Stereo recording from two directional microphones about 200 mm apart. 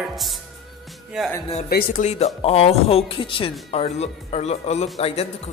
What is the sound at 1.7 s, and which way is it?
Speech, 40° left (ahead or behind).